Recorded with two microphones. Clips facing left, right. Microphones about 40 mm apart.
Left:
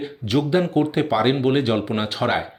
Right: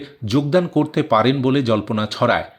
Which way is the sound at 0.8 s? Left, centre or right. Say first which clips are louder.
Right 3 dB; centre.